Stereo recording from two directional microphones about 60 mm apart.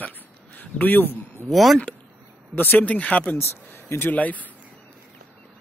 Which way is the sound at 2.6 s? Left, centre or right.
Left.